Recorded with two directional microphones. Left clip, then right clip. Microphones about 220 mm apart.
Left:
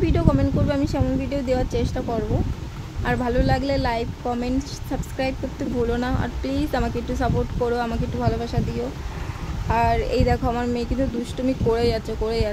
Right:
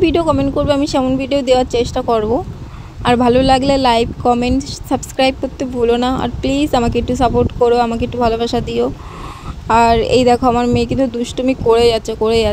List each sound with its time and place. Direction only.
0.0 s a woman's voice: 25° right (ahead or behind)